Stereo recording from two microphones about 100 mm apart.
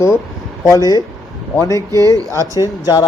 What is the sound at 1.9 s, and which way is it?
Speech, 35° right (ahead or behind).